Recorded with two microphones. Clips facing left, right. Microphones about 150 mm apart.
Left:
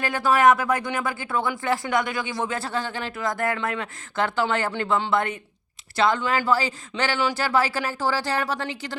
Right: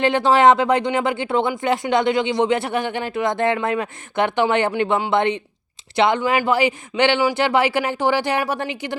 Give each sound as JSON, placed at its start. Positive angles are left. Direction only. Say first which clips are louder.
{"t": 0.0, "sound": "a woman's voice", "louder": "right 5 dB", "side_deg": -25}